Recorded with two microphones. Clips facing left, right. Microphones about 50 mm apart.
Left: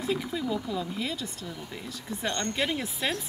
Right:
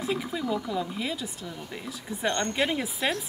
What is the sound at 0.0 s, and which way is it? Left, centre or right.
Speech, centre.